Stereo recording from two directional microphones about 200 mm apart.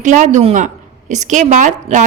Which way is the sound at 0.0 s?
40° right (ahead or behind).